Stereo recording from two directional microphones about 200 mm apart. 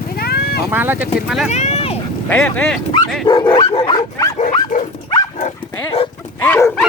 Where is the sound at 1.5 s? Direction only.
35° left (ahead or behind).